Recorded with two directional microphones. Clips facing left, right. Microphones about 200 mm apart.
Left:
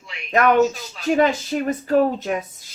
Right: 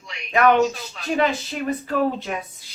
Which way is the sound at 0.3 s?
45° left (ahead or behind).